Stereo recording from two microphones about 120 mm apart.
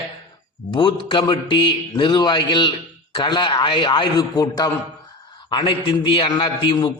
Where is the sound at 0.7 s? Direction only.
45° left (ahead or behind).